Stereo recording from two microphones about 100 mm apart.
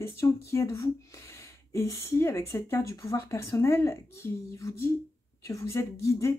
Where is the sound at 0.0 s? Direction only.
25° left (ahead or behind).